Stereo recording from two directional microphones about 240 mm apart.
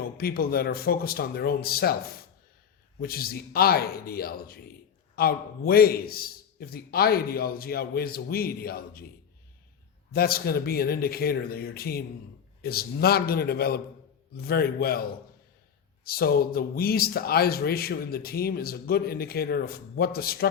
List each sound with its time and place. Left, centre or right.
0.2 s speech: left
3.0 s speech: left
10.1 s speech: left
16.0 s speech: left